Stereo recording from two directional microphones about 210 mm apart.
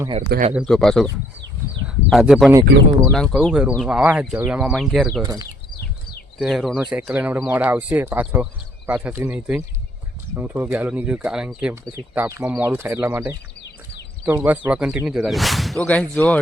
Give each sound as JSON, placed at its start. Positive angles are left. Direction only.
{"t": 0.5, "sound": "speech", "side_deg": 0}
{"t": 2.0, "sound": "speech", "side_deg": 0}
{"t": 5.2, "sound": "speech", "side_deg": -20}
{"t": 6.4, "sound": "speech", "side_deg": 0}